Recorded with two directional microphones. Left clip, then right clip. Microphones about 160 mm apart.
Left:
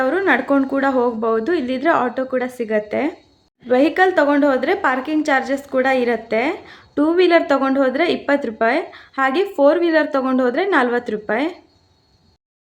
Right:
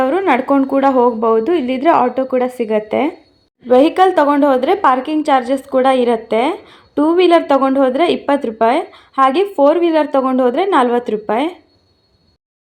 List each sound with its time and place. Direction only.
0.0 s a woman's voice: 10° right (ahead or behind)